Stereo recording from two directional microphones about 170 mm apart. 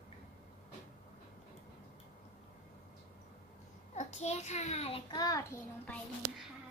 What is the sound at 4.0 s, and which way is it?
A child's voice, 40° left (ahead or behind).